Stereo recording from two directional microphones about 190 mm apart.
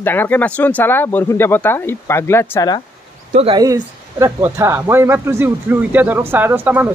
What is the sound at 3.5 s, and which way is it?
Speech, 20° right (ahead or behind).